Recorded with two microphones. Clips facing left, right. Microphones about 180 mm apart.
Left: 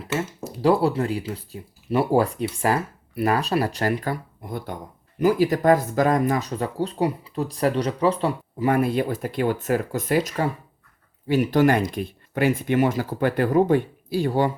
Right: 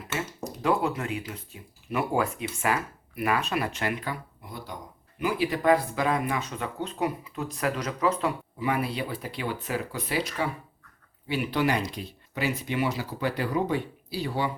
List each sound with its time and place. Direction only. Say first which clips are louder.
0.6 s speech: left 7 dB; 35° left (ahead or behind)
8.6 s speech: left 8 dB; 50° left (ahead or behind)